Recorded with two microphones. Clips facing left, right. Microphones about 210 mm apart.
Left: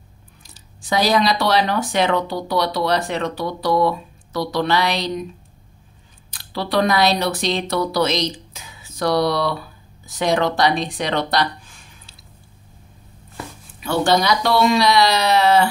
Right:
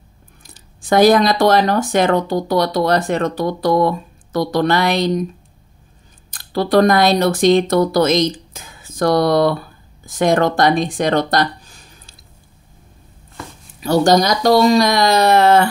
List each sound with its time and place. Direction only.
0.6 s speech: 50° right (ahead or behind)
6.3 s speech: 45° right (ahead or behind)
13.7 s speech: 40° right (ahead or behind)